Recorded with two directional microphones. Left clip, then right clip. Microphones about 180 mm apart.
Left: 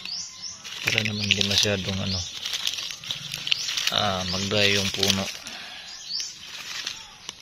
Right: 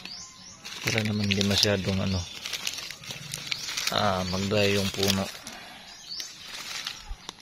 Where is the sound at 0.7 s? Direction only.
50° right (ahead or behind).